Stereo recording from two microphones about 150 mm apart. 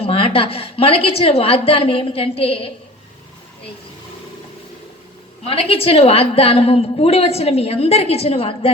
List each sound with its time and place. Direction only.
0.0 s a woman's voice: 40° left (ahead or behind)
5.5 s a woman's voice: 40° left (ahead or behind)